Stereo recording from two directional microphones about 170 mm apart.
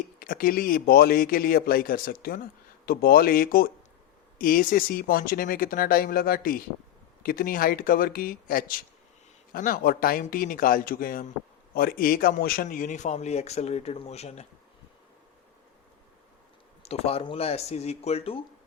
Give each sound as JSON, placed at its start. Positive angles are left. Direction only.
{"t": 0.2, "sound": "a man's voice", "side_deg": 60}
{"t": 16.8, "sound": "speech", "side_deg": 35}